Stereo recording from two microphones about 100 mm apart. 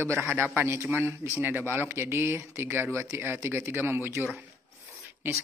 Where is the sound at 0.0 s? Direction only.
25° right (ahead or behind).